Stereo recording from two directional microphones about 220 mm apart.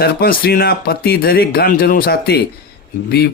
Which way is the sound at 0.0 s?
45° left (ahead or behind).